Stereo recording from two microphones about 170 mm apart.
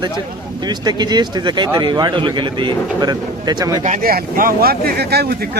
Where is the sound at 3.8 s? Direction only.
50° right (ahead or behind); by 5.4 s 70° right (ahead or behind).